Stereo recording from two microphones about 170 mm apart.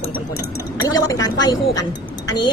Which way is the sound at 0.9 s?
20° left (ahead or behind).